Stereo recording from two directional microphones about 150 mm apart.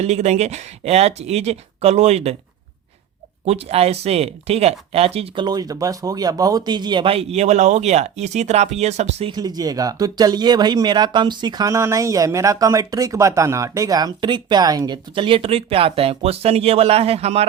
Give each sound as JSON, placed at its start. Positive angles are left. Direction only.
{"t": 0.0, "sound": "speech", "side_deg": -50}
{"t": 3.4, "sound": "speech", "side_deg": -40}
{"t": 9.3, "sound": "speech", "side_deg": -25}